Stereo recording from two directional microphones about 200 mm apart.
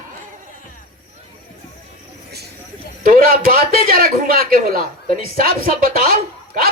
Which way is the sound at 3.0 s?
45° right (ahead or behind).